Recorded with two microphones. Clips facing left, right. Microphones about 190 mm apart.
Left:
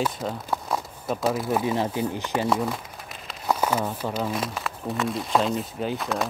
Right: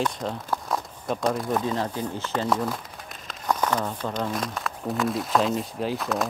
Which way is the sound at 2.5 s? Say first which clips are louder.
Left 1 dB; centre (ahead or behind).